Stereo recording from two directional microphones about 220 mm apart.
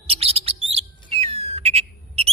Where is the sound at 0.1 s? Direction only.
25° right (ahead or behind).